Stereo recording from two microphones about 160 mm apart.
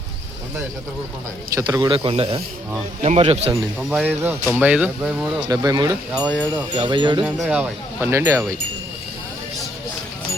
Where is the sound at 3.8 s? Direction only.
10° right (ahead or behind).